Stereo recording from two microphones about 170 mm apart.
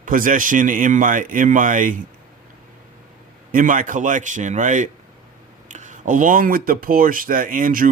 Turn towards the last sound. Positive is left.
turn(degrees=-55)  # may be behind; listen again after turning